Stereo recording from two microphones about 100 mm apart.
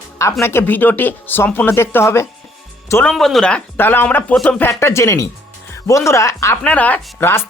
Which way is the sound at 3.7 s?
20° left (ahead or behind).